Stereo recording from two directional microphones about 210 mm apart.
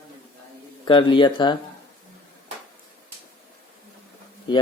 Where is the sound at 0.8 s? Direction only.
25° left (ahead or behind).